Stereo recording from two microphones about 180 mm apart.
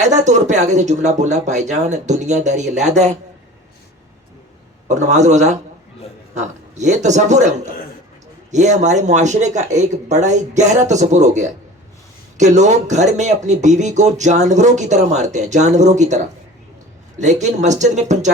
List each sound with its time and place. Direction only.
0.0 s speech: 40° right (ahead or behind)
4.9 s speech: 40° right (ahead or behind)